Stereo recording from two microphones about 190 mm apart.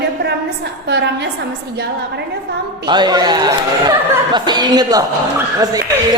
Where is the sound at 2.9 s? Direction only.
20° right (ahead or behind).